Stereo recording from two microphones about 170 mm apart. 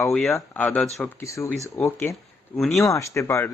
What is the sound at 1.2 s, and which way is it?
Speech, 15° left (ahead or behind).